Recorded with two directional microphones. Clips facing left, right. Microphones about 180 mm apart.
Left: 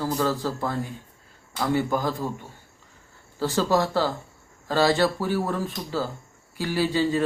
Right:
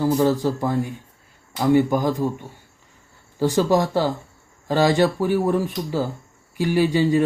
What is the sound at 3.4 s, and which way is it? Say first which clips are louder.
Speech: right 4 dB; 15° right (ahead or behind).